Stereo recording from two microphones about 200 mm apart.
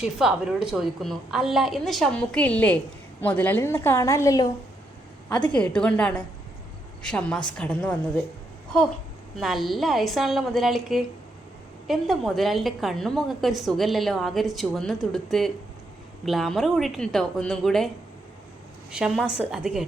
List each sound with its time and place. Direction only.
0.0 s a woman's voice: 5° right (ahead or behind); by 4.4 s 15° left (ahead or behind)
5.5 s a woman's voice: 5° left (ahead or behind)
9.4 s a woman's voice: centre (ahead or behind)